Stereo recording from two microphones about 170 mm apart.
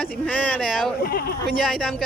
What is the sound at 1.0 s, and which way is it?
Speech, 65° left (ahead or behind).